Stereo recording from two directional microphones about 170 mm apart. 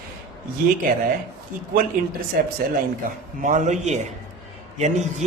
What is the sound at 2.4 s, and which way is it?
Speech, 60° right (ahead or behind).